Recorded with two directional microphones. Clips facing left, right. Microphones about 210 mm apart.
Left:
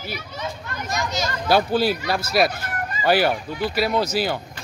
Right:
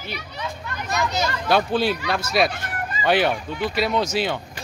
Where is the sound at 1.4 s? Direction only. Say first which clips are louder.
Left 2 dB; 5° left (ahead or behind).